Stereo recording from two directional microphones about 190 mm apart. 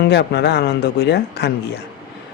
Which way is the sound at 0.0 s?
60° left (ahead or behind).